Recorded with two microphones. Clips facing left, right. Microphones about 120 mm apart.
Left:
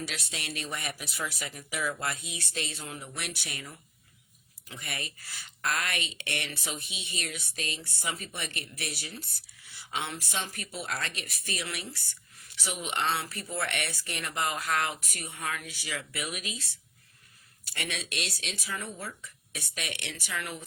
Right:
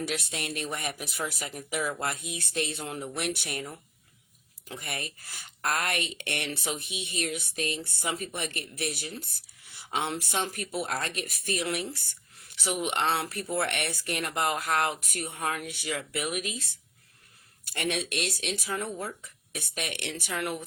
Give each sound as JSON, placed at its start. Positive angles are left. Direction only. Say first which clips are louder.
{"t": 0.0, "sound": "speech", "louder": "right 5 dB", "side_deg": -50}
{"t": 4.7, "sound": "speech", "louder": "right 3 dB", "side_deg": -55}